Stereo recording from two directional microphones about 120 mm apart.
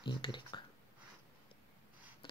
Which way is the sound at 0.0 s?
40° left (ahead or behind).